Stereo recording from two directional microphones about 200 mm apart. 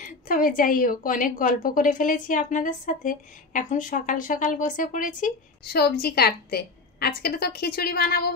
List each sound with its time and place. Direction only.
0.0 s a woman's voice: 40° left (ahead or behind)